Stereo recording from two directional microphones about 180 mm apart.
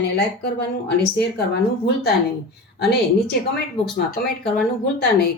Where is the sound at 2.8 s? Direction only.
65° left (ahead or behind).